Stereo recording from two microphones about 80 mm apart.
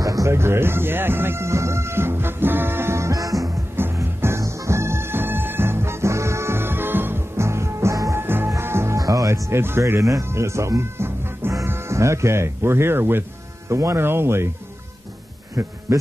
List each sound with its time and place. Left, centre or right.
0.0 s music: right
3.7 s music: right
8.2 s music: right
11.5 s speech: right
15.6 s speech: right